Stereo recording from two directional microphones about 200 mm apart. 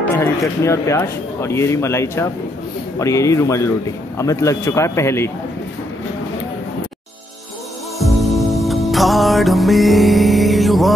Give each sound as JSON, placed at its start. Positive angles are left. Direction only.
{"t": 0.1, "sound": "speech", "side_deg": 15}
{"t": 8.0, "sound": "music", "side_deg": 0}